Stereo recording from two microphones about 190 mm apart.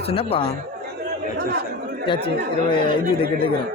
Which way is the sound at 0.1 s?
30° left (ahead or behind).